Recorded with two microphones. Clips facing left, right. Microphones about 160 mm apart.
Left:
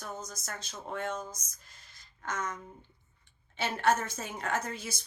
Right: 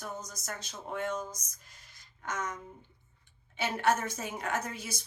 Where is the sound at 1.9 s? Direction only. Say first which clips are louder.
Left 1 dB; 15° right (ahead or behind).